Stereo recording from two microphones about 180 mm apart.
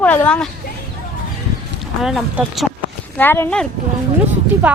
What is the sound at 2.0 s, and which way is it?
Speech, centre (ahead or behind).